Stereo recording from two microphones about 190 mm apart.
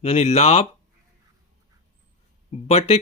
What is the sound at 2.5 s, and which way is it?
Speech, 35° left (ahead or behind).